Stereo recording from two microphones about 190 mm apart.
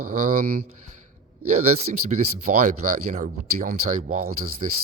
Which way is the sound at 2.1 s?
45° right (ahead or behind).